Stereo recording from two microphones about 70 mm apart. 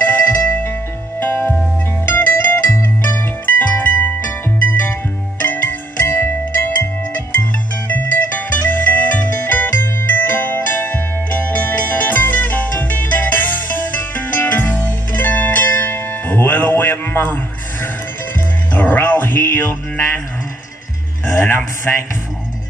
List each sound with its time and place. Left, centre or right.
0.0 s music: left
5.4 s music: left
21.4 s a sound: left
21.9 s music: left